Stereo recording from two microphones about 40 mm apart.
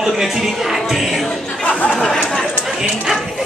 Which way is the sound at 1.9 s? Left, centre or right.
Centre.